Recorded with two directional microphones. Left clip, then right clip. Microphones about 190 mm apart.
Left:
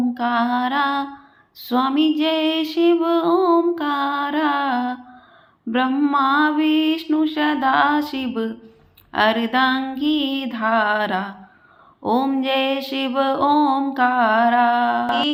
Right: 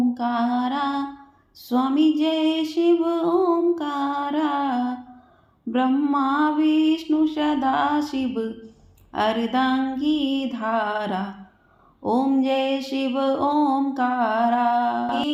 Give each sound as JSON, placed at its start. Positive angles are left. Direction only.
{"t": 0.1, "sound": "female singing", "side_deg": 10}
{"t": 13.1, "sound": "music", "side_deg": 15}